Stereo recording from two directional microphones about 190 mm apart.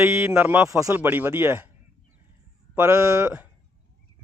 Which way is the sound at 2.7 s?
15° right (ahead or behind).